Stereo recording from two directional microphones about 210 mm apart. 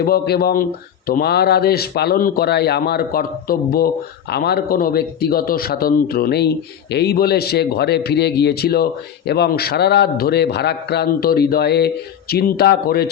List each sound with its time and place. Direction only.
0.0 s a man's voice: 45° left (ahead or behind)